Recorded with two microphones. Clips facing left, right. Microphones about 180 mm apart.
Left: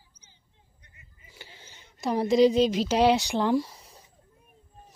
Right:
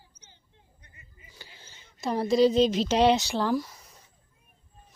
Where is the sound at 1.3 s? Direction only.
20° left (ahead or behind).